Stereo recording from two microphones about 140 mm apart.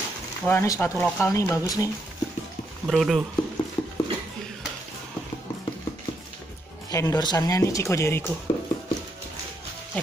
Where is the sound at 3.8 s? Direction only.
30° left (ahead or behind).